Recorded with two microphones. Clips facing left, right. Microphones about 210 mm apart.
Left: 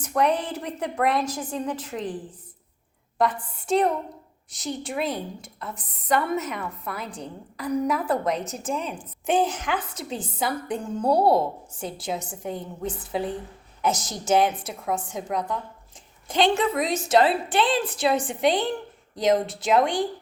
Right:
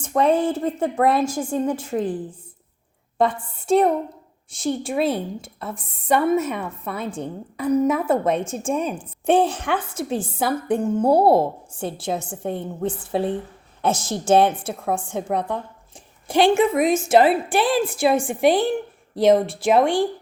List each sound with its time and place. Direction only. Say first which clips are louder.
0.0 s a woman's voice: right 5 dB; 25° right (ahead or behind)
3.2 s a woman's voice: right 4 dB; 25° right (ahead or behind)